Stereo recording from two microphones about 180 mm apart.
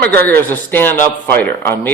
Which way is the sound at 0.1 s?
60° right (ahead or behind).